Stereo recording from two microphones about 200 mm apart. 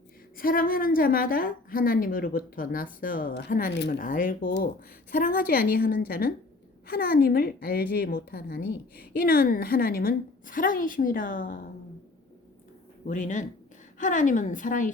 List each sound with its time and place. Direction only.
0.3 s a woman's voice: 45° left (ahead or behind)
13.1 s a woman's voice: 40° left (ahead or behind)